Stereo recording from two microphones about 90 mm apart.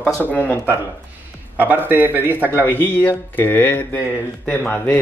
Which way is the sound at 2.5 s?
20° left (ahead or behind).